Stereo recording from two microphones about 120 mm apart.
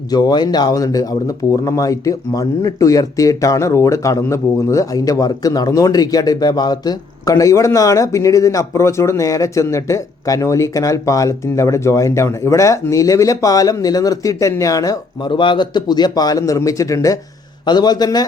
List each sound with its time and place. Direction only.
0.1 s a man's voice: 35° left (ahead or behind)